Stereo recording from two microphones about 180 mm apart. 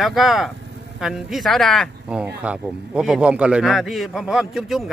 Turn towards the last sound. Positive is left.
turn(degrees=0)  # may be behind; listen again after turning